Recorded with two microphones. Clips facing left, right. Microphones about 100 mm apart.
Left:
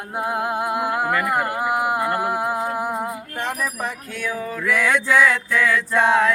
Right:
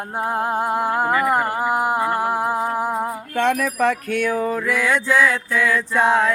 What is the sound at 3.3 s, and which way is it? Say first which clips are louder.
Music: right 10 dB; 75° right (ahead or behind).